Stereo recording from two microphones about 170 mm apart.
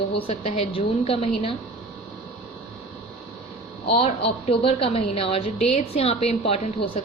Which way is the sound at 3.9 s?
35° left (ahead or behind).